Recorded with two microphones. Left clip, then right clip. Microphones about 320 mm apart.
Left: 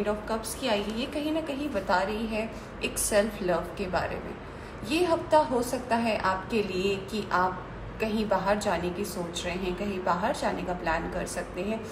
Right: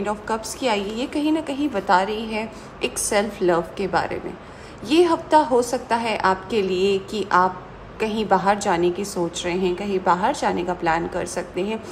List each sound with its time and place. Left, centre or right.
0.0 s a woman's voice: centre